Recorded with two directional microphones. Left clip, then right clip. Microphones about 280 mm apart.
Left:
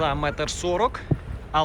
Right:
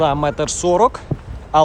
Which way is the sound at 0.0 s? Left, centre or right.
Centre.